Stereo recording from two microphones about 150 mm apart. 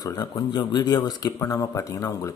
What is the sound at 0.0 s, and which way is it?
Speech, 25° left (ahead or behind).